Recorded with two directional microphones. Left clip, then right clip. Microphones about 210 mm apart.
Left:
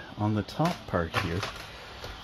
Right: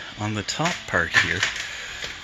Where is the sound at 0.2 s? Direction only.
10° right (ahead or behind).